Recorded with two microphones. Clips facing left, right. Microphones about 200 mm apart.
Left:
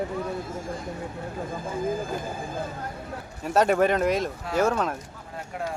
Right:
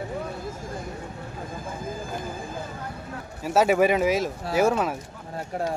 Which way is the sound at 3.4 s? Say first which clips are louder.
Right 1 dB; 5° right (ahead or behind).